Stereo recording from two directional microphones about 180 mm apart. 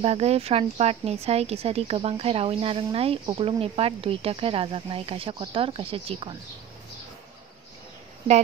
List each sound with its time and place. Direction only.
0.0 s speech: 35° right (ahead or behind)